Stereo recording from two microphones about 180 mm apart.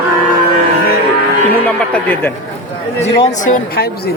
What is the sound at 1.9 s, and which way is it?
Speech, 10° left (ahead or behind).